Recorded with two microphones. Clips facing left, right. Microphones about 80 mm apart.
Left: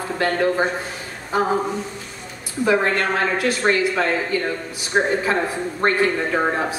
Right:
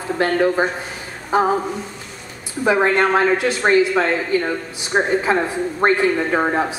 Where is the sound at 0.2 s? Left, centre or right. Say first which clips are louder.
Right 2 dB; right.